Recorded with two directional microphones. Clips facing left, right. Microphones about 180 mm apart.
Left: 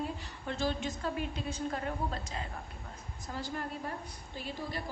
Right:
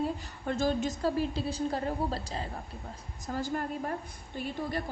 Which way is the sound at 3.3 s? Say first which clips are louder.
Right 6 dB; 45° right (ahead or behind).